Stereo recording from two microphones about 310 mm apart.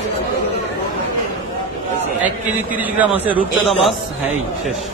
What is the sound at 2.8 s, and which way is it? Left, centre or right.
Speech, centre.